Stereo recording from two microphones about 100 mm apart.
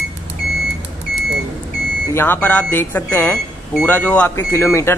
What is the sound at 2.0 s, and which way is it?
A man's voice, 20° left (ahead or behind).